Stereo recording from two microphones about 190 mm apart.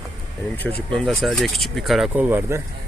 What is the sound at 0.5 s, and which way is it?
Speech, 10° left (ahead or behind).